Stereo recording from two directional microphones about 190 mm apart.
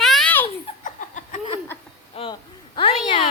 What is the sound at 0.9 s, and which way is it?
Laughter, 40° left (ahead or behind).